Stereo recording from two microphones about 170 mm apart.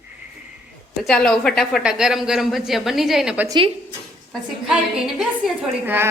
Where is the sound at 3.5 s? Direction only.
30° right (ahead or behind).